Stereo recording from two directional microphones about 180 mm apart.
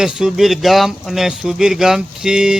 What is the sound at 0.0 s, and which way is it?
Speech, centre (ahead or behind).